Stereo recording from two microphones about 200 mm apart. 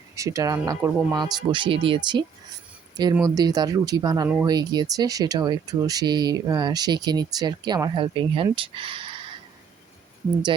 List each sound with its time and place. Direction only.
0.2 s speech: 15° right (ahead or behind)